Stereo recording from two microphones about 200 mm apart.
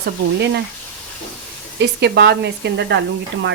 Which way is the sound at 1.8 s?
55° right (ahead or behind).